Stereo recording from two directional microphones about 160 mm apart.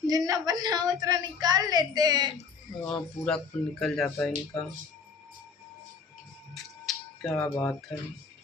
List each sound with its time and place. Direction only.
0.1 s a woman's voice: 25° right (ahead or behind)
2.8 s speech: 5° left (ahead or behind)
6.5 s a sound: centre (ahead or behind)
7.3 s speech: 15° left (ahead or behind)